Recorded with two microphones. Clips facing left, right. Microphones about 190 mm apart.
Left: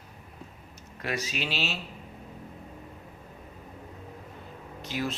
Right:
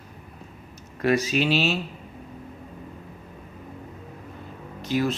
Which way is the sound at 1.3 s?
45° right (ahead or behind).